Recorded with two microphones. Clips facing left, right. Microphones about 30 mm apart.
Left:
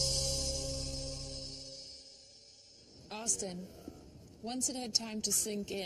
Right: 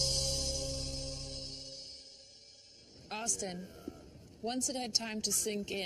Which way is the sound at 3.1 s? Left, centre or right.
Right.